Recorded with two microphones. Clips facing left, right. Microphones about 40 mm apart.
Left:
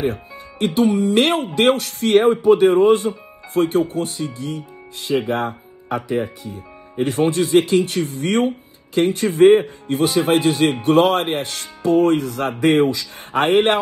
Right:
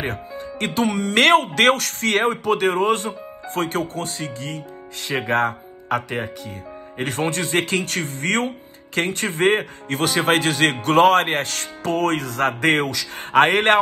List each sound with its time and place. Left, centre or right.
0.0 s speech: right